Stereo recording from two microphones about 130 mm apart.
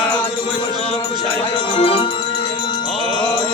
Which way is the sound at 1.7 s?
45° left (ahead or behind).